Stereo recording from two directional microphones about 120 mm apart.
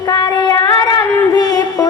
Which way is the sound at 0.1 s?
30° left (ahead or behind).